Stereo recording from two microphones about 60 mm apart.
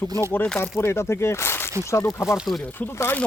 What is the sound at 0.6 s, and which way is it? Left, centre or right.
Speech, left.